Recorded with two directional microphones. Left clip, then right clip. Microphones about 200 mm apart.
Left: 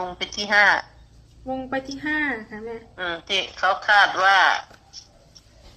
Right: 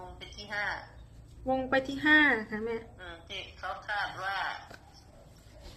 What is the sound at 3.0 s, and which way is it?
A man's voice, 60° left (ahead or behind).